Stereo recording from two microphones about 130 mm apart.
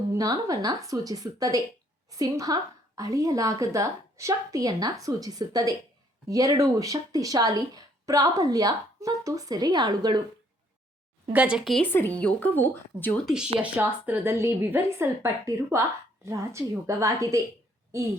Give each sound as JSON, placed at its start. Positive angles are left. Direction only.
{"t": 0.1, "sound": "speech", "side_deg": -25}
{"t": 11.3, "sound": "speech", "side_deg": -10}
{"t": 11.9, "sound": "speech", "side_deg": 15}
{"t": 13.2, "sound": "speech", "side_deg": -5}